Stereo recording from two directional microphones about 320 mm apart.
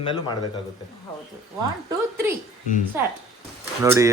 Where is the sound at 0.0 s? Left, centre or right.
Centre.